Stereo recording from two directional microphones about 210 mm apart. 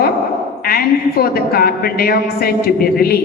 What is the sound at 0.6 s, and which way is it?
A woman's voice, 45° left (ahead or behind).